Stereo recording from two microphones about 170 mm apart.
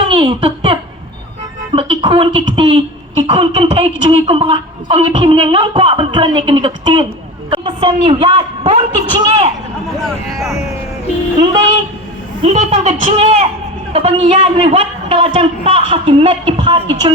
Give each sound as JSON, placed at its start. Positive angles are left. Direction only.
{"t": 0.0, "sound": "giggle", "side_deg": -35}
{"t": 1.7, "sound": "a sound", "side_deg": -30}
{"t": 3.2, "sound": "speech", "side_deg": -35}
{"t": 10.0, "sound": "speech", "side_deg": 0}
{"t": 12.5, "sound": "speech", "side_deg": -40}